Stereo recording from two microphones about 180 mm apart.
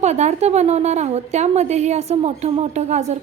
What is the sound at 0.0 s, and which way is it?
A woman's voice, 40° right (ahead or behind).